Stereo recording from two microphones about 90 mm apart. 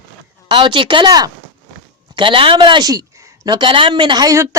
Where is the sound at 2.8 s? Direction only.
40° right (ahead or behind).